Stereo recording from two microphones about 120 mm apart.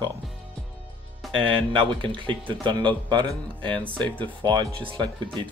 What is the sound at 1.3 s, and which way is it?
Speech, 45° right (ahead or behind).